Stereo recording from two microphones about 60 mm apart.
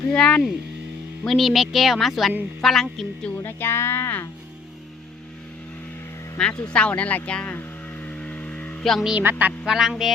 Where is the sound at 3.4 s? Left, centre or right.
Left.